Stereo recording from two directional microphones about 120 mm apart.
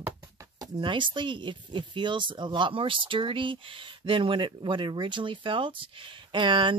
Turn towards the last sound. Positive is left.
turn(degrees=-40)  # may be behind; listen again after turning